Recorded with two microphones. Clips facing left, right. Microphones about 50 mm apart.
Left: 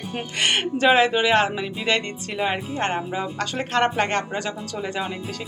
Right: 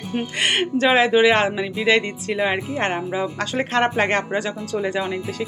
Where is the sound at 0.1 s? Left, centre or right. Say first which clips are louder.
Right 2 dB; centre.